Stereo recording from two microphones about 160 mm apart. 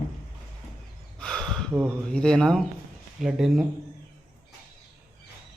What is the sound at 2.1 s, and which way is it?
A man's voice, 5° left (ahead or behind).